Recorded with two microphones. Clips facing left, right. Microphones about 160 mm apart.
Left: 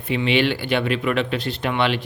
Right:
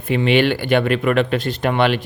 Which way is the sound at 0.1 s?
50° right (ahead or behind).